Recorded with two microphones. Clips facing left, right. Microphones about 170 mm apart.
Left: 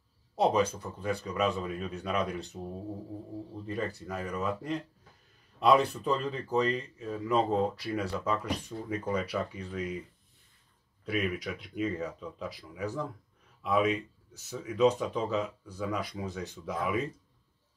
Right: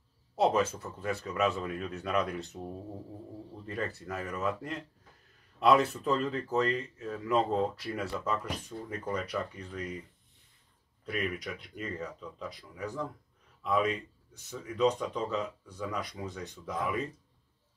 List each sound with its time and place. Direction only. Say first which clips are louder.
0.4 s speech: left 1 dB; 5° right (ahead or behind)
11.1 s speech: left 3 dB; centre (ahead or behind)